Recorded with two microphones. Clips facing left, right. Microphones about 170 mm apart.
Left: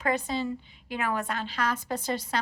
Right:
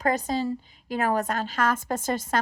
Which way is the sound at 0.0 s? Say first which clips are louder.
Right 3 dB; 40° right (ahead or behind).